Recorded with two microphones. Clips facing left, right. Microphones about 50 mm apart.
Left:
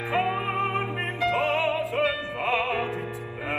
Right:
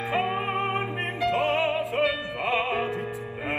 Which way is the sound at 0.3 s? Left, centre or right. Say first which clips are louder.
Even; right.